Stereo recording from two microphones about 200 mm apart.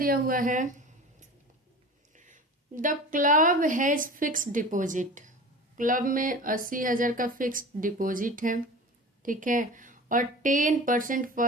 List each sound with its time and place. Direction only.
0.0 s speech: 45° right (ahead or behind)
2.1 s a woman's voice: 40° right (ahead or behind)